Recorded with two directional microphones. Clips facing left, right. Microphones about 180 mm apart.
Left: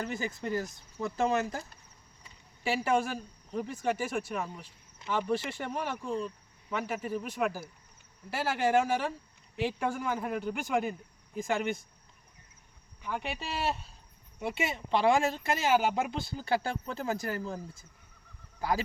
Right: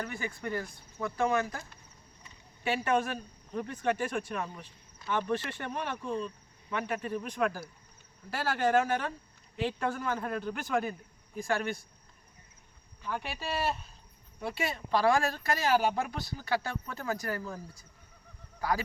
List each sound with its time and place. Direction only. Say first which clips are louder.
1.0 s speech: even; 25° left (ahead or behind)
2.6 s speech: left 1 dB; 10° left (ahead or behind)
13.0 s speech: left 1 dB; 15° left (ahead or behind)